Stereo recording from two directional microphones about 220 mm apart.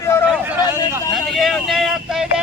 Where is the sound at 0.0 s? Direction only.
10° left (ahead or behind).